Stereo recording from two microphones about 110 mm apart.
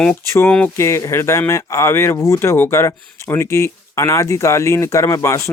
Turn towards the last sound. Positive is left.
turn(degrees=25)  # may be behind; listen again after turning